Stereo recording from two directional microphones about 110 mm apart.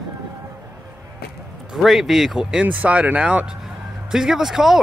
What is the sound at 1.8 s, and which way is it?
Speech, centre (ahead or behind).